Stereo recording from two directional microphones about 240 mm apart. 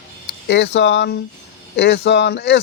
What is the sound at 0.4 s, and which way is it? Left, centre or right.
Speech, left.